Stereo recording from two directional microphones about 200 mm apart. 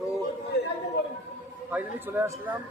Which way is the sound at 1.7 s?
10° right (ahead or behind).